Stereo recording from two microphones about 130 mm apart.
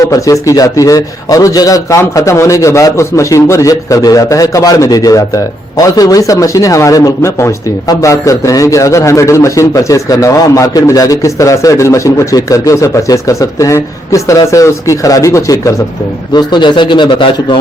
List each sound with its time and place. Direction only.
0.0 s a man's voice: 25° left (ahead or behind)
16.3 s a man's voice: 35° left (ahead or behind)